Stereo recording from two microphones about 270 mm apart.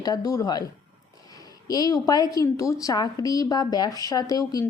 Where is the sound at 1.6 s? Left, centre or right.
Centre.